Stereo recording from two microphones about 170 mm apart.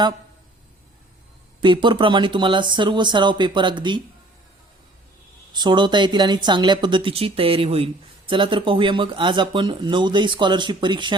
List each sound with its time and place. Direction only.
1.6 s speech: 30° right (ahead or behind)
5.5 s speech: 25° right (ahead or behind)